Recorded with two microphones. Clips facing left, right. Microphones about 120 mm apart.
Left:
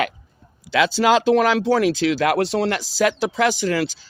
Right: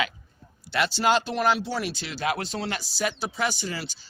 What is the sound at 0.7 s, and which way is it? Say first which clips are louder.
Speech: left 6 dB; 90° left.